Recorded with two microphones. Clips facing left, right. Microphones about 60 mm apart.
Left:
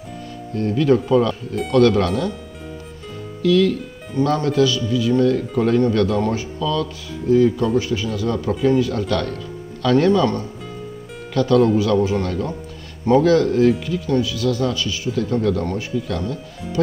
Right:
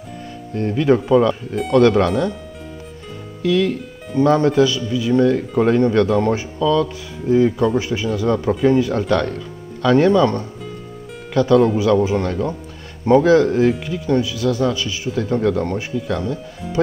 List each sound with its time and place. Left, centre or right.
0.6 s speech: right
3.4 s speech: right